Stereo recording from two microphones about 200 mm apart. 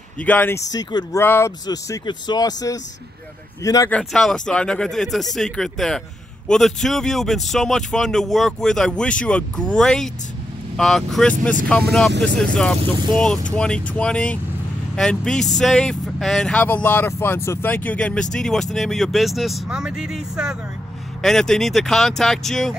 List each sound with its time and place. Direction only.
0.2 s speech: 10° left (ahead or behind)
3.9 s speech: centre (ahead or behind)